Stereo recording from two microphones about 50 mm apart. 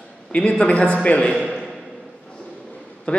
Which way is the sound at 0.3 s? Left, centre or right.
Left.